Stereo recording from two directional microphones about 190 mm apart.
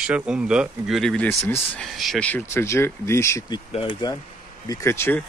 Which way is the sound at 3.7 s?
25° left (ahead or behind).